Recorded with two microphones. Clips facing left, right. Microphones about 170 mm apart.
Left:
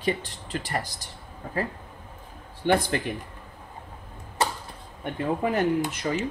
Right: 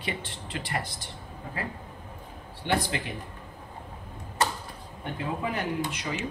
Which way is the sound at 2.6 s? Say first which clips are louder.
Left 5 dB; 50° left (ahead or behind).